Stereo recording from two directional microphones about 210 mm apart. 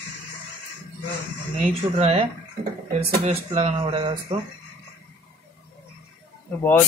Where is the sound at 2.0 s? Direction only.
30° right (ahead or behind).